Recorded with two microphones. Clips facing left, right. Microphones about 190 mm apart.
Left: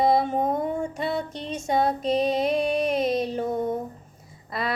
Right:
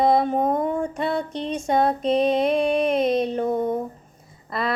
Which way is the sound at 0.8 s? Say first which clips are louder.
Right 3 dB; 5° left (ahead or behind).